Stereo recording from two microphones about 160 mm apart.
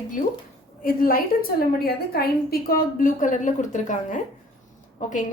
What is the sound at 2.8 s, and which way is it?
A woman's voice, 60° left (ahead or behind).